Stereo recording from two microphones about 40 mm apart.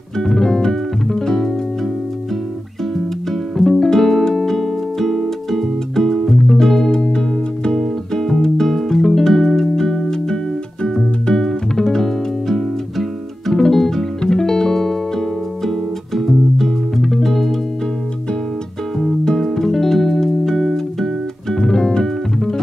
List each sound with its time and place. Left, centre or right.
0.2 s music: centre
3.5 s music: centre
6.9 s music: centre
19.2 s music: centre